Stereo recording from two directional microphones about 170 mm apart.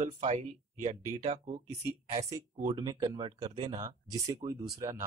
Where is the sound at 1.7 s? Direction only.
20° right (ahead or behind).